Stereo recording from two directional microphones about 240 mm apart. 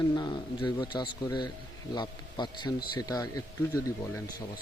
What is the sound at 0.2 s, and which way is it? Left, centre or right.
A man's voice, centre.